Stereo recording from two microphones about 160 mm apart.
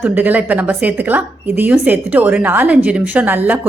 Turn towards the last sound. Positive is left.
turn(degrees=-10)  # may be behind; listen again after turning